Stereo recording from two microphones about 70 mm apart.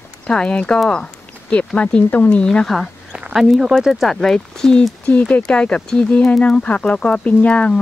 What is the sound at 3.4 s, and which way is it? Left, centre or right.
Speech, centre.